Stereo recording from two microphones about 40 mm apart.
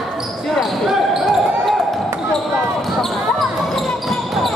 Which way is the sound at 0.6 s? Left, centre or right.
Centre.